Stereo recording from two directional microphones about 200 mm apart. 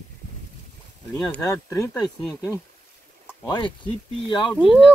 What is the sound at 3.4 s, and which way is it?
Speech, 20° left (ahead or behind).